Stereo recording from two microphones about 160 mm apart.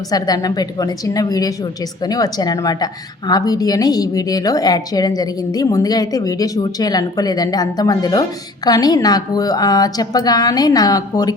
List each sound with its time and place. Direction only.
0.1 s a woman's voice: 25° left (ahead or behind)